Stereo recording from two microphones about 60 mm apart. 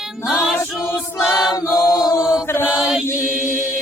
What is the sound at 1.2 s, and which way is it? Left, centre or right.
Choir, centre.